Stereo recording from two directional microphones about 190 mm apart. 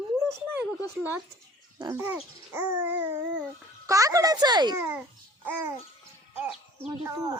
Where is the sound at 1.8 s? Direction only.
15° right (ahead or behind).